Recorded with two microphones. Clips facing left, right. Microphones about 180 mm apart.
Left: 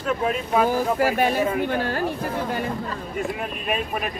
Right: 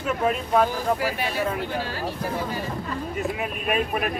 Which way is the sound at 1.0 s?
50° left (ahead or behind).